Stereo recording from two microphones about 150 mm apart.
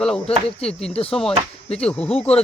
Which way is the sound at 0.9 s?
40° left (ahead or behind).